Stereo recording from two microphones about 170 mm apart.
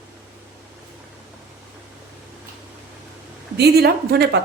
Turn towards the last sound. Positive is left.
turn(degrees=-70)  # may be behind; listen again after turning